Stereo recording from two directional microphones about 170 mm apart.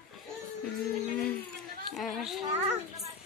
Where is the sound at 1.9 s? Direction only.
Centre (ahead or behind).